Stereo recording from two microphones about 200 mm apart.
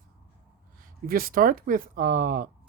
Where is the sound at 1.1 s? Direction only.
45° right (ahead or behind).